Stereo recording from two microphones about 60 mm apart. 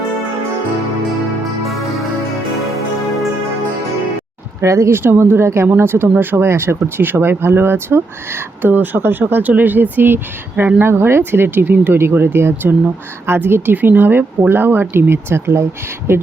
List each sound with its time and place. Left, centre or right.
4.6 s speech: right
5.6 s speech: right